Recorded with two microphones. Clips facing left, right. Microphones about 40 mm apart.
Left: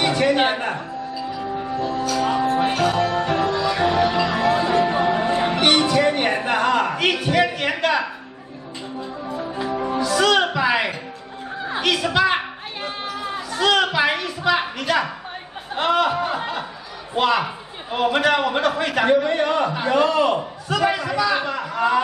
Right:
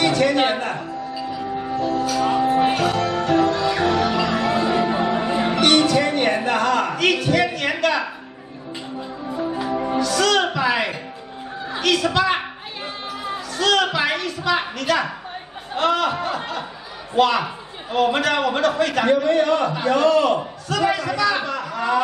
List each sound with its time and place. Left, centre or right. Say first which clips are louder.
0.0 s a man's voice: even; centre
1.4 s music: right 1 dB; centre
1.8 s music: right 3 dB; centre
2.0 s music: even; centre
2.9 s music: right 1 dB; centre
3.5 s music: even; centre
3.8 s music: left 2 dB; centre
5.9 s speech: even; centre
9.5 s music: even; centre
9.9 s music: left 1 dB; centre
12.0 s a man's voice: even; centre
13.6 s a woman's voice: left 1 dB; centre